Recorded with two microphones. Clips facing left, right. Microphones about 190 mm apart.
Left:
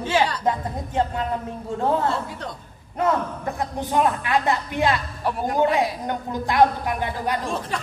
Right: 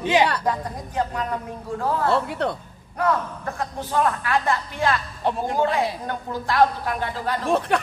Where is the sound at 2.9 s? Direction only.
20° left (ahead or behind).